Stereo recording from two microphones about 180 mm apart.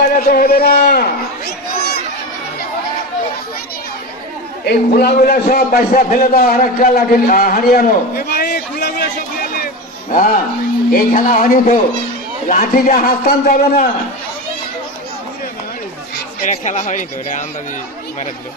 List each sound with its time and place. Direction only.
0.0 s a man's voice: 55° left (ahead or behind)
4.6 s a man's voice: 60° left (ahead or behind)
8.8 s a sound: 55° left (ahead or behind)
10.1 s a man's voice: 50° left (ahead or behind)
16.5 s speech: 40° left (ahead or behind)